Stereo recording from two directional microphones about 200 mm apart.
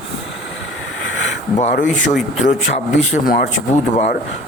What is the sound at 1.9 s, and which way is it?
Speech, centre (ahead or behind).